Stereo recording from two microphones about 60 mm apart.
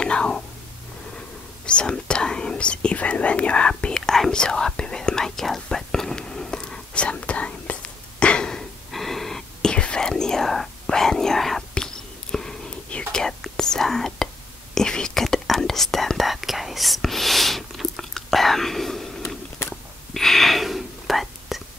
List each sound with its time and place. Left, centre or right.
0.0 s whispering: centre
1.7 s whispering: centre
20.2 s whispering: centre